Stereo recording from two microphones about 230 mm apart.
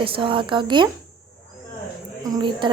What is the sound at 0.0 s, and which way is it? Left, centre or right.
Speech, right.